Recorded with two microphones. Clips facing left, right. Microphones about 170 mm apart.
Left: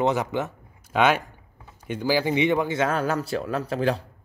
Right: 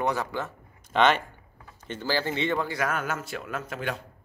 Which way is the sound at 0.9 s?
10° left (ahead or behind).